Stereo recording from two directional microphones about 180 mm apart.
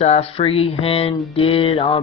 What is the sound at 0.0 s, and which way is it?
Speech, 35° left (ahead or behind).